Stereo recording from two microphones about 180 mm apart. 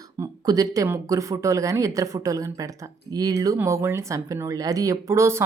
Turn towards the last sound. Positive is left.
turn(degrees=-15)  # may be behind; listen again after turning